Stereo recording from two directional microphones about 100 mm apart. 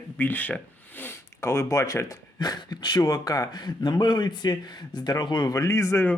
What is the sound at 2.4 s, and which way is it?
A man's voice, 45° left (ahead or behind).